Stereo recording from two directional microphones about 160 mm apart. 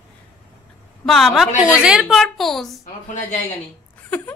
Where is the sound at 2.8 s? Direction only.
45° left (ahead or behind).